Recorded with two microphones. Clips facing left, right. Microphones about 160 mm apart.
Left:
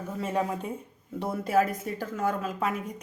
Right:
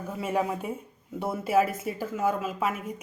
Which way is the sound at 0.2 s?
10° right (ahead or behind).